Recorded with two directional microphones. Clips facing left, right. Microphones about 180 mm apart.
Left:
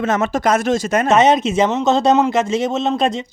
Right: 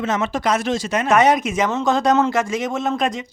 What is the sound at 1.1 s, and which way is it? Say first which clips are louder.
Speech: left 2 dB; 25° left (ahead or behind).